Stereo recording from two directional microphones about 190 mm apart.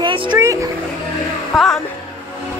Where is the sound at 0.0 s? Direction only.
25° right (ahead or behind).